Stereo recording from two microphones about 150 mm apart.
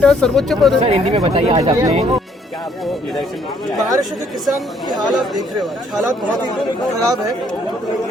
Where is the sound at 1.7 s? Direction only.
20° right (ahead or behind).